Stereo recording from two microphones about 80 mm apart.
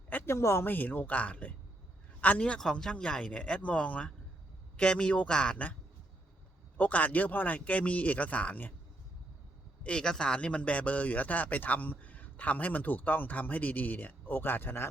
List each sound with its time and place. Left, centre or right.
0.1 s a sound: left
0.3 s speech: left; by 5.7 s centre
6.7 s speech: centre
9.8 s speech: centre; by 14.8 s left